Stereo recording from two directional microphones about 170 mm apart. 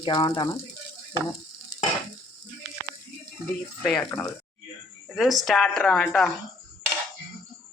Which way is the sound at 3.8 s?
5° left (ahead or behind).